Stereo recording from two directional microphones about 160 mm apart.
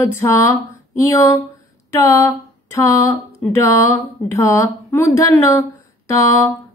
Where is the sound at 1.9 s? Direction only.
20° left (ahead or behind).